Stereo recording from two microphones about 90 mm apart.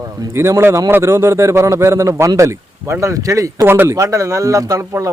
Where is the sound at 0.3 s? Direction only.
30° right (ahead or behind).